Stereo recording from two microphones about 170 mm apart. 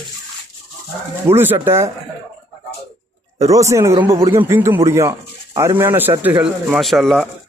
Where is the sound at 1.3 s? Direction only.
10° right (ahead or behind).